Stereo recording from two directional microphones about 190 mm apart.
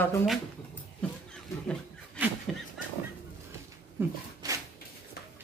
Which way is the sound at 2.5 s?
Centre (ahead or behind).